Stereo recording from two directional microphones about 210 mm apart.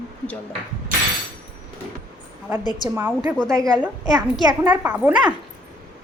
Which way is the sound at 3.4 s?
15° right (ahead or behind).